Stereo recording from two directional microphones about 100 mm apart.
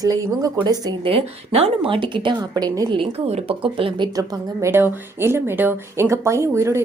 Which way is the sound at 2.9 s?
75° right (ahead or behind).